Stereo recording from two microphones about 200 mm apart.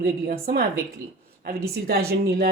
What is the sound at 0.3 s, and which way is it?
Speech, 50° right (ahead or behind).